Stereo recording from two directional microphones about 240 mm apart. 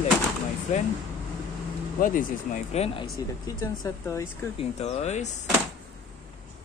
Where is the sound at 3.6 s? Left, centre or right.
Centre.